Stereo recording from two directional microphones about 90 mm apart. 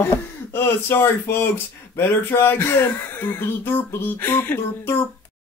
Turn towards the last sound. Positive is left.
turn(degrees=25)  # may be behind; listen again after turning